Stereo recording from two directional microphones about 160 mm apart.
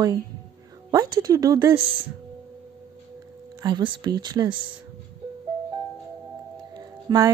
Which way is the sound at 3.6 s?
25° right (ahead or behind).